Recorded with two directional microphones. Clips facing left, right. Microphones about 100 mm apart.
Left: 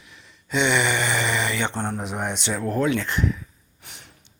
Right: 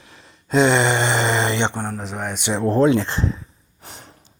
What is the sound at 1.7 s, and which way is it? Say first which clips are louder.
Speech: even; 10° right (ahead or behind).